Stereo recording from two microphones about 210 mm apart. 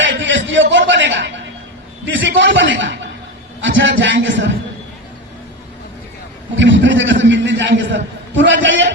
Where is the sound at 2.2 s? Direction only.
60° right (ahead or behind).